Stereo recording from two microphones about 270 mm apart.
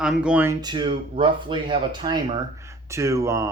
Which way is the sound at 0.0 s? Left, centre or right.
Centre.